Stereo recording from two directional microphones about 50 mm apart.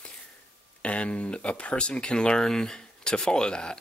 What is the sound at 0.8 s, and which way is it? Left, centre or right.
Speech, left.